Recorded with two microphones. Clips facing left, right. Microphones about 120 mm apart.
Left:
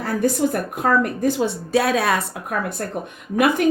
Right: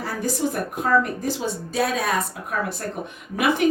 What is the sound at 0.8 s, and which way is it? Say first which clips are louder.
A woman's voice: left 2 dB; 60° left (ahead or behind).